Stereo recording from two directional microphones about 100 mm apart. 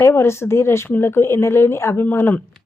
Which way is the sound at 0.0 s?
25° left (ahead or behind).